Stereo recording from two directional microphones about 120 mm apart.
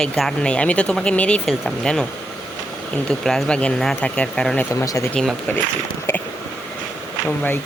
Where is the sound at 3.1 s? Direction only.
5° left (ahead or behind).